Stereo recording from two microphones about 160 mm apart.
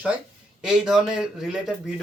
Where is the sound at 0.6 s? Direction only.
5° right (ahead or behind).